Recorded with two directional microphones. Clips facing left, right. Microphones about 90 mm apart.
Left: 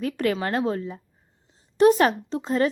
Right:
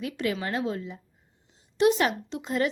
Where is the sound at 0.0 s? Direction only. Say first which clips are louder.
Left 5 dB; 50° left (ahead or behind).